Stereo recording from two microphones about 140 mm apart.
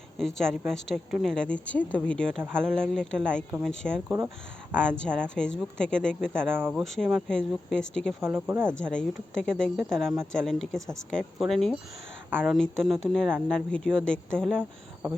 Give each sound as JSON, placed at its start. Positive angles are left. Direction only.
{"t": 0.2, "sound": "speech", "side_deg": 5}
{"t": 6.6, "sound": "speech", "side_deg": -10}
{"t": 6.8, "sound": "speech", "side_deg": 0}
{"t": 8.2, "sound": "speech", "side_deg": -15}
{"t": 8.7, "sound": "speech", "side_deg": 5}